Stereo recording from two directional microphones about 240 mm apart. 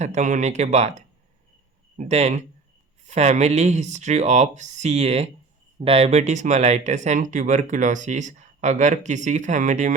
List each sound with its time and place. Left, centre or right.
0.0 s speech: right